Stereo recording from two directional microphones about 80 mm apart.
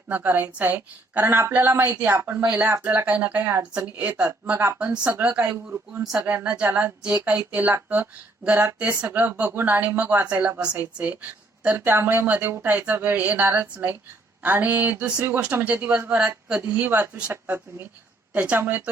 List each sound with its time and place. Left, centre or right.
0.1 s a woman's voice: right
4.5 s speech: right
4.8 s a woman's voice: centre
6.0 s speech: centre
6.2 s a woman's voice: right
18.3 s a woman's voice: right